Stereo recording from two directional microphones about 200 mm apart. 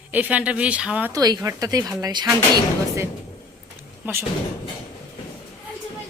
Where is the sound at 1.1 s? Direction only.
15° right (ahead or behind).